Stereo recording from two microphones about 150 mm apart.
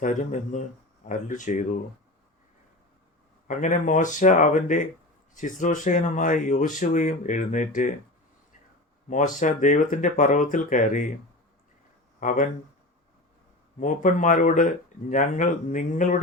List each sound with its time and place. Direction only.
0.0 s speech: 55° left (ahead or behind)
3.4 s speech: 55° left (ahead or behind)
9.0 s speech: 60° left (ahead or behind)
12.2 s speech: 55° left (ahead or behind)
13.7 s speech: 55° left (ahead or behind)